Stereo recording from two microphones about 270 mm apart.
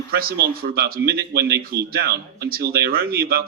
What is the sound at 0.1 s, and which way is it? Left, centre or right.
Speech, right.